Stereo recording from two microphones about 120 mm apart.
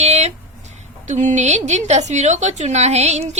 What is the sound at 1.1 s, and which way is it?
A woman's voice, 80° right.